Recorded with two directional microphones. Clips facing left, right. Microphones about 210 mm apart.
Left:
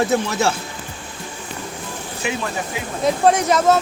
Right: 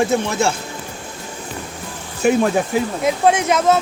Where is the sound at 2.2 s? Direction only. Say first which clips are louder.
Right 10 dB; 45° right (ahead or behind).